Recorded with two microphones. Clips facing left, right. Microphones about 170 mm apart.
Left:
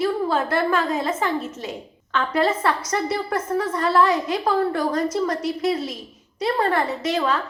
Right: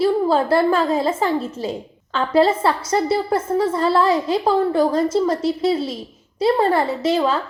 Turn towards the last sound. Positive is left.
turn(degrees=-30)  # may be behind; listen again after turning